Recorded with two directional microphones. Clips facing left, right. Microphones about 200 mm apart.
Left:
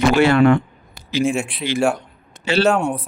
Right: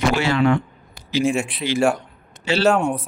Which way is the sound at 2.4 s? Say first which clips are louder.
Left 3 dB; 55° left (ahead or behind).